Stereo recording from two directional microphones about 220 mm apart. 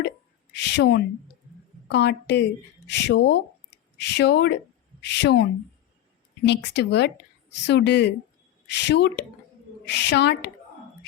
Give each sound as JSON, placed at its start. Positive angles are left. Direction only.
{"t": 0.5, "sound": "a woman's voice", "side_deg": 50}